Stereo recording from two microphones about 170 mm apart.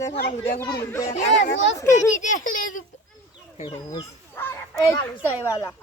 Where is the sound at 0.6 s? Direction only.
20° left (ahead or behind).